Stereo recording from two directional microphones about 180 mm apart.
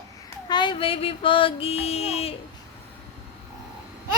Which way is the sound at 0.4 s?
25° left (ahead or behind).